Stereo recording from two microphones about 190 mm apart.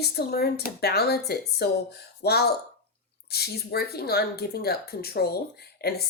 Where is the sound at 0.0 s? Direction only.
55° left (ahead or behind).